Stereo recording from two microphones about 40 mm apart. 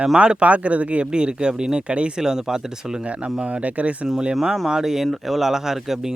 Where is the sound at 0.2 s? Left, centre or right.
Right.